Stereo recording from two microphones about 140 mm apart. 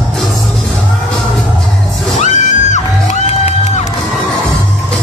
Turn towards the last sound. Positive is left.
turn(degrees=50)  # may be behind; listen again after turning